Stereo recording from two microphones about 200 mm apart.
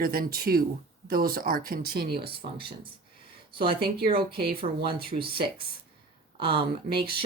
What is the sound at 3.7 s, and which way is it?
A woman's voice, 50° right (ahead or behind).